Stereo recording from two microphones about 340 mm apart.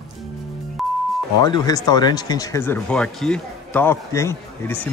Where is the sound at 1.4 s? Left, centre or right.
Centre.